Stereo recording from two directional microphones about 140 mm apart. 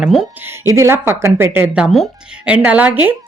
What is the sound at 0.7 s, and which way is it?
Speech, 20° right (ahead or behind).